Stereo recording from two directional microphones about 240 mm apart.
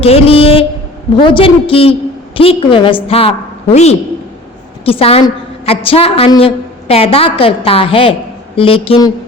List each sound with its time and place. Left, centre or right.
0.0 s a woman's voice: left